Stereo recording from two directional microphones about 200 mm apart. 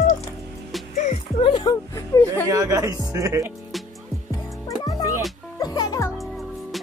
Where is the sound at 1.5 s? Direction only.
20° left (ahead or behind).